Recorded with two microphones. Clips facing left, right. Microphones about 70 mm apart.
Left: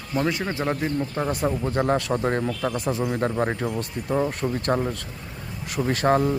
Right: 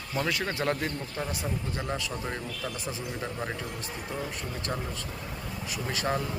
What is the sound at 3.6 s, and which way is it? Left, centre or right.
Speech, left.